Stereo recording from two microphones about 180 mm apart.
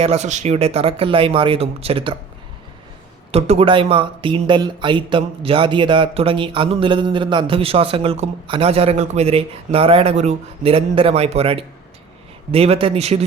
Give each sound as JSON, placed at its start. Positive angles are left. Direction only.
{"t": 0.0, "sound": "speech", "side_deg": -35}
{"t": 3.3, "sound": "speech", "side_deg": -35}